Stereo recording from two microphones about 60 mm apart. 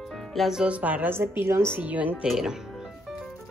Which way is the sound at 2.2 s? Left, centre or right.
Centre.